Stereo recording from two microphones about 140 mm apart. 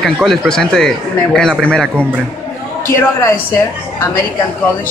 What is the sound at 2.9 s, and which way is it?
Speech, 20° left (ahead or behind).